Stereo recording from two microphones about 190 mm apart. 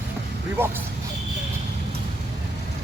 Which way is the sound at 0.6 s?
10° right (ahead or behind).